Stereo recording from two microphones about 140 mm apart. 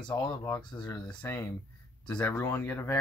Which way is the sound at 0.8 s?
15° left (ahead or behind).